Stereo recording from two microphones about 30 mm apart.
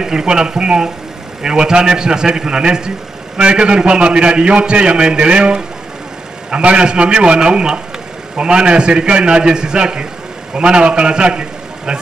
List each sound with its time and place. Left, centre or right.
0.0 s a man's voice: right